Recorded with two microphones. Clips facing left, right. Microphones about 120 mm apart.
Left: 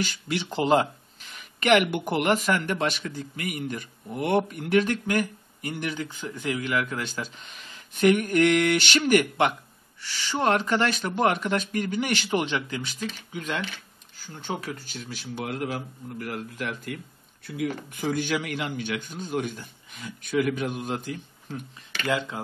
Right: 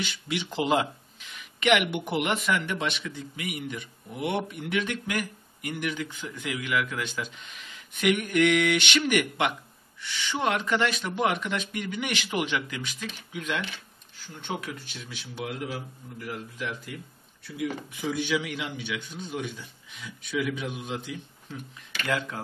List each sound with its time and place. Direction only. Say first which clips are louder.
0.0 s speech: left 3 dB; 40° left (ahead or behind)
1.9 s speech: left 3 dB; centre (ahead or behind)
2.1 s a man's voice: left 3 dB; 40° left (ahead or behind)